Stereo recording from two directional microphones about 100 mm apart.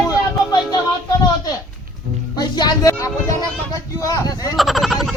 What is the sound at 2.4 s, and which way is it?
Music, 45° left (ahead or behind).